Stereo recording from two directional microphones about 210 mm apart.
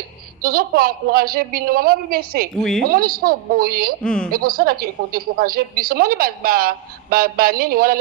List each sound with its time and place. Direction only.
0.4 s a woman's voice: 45° right (ahead or behind)
4.0 s a woman's voice: 5° left (ahead or behind)
4.3 s a woman's voice: 45° right (ahead or behind)